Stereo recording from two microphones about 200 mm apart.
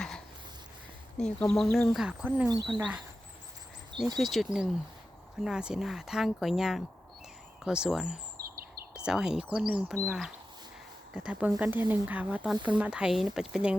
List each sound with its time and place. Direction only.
1.2 s speech: 5° left (ahead or behind)
4.2 s speech: centre (ahead or behind)
8.4 s chirp: 50° right (ahead or behind)
8.9 s speech: 5° right (ahead or behind)